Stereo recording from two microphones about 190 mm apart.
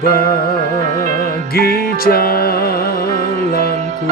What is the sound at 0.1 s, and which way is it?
Music, 55° left (ahead or behind).